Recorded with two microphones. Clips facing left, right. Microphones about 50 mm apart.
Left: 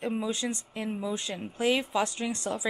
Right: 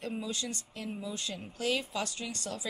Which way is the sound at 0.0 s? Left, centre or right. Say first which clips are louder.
Left 6 dB; left.